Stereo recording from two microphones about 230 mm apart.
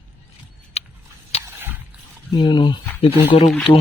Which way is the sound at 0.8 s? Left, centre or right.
Left.